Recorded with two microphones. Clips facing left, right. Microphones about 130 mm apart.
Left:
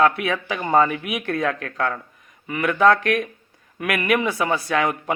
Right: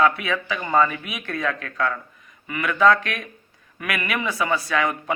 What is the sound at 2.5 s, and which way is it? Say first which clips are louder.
Speech: left 1 dB; 40° left (ahead or behind).